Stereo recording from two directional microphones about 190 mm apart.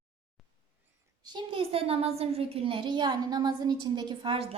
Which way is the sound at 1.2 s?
25° right (ahead or behind).